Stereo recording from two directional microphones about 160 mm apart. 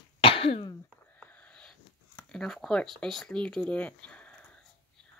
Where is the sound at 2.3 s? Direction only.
5° left (ahead or behind).